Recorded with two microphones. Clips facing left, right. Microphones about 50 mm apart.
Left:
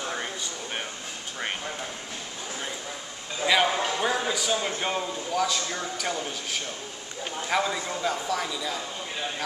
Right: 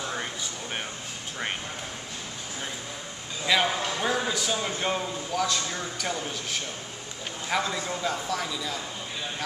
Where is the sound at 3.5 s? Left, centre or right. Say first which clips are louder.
Left 2 dB; centre.